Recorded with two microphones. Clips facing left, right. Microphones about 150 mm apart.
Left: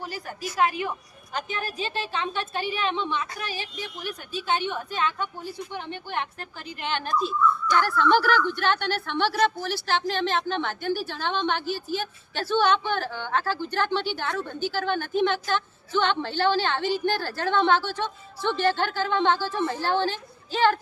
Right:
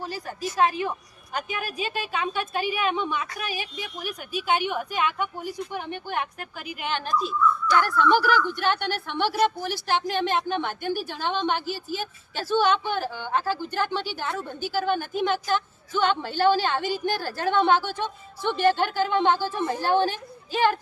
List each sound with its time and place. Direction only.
0.0 s a woman's voice: 15° left (ahead or behind)
0.4 s a woman's voice: 30° right (ahead or behind)
0.9 s a woman's voice: 10° right (ahead or behind)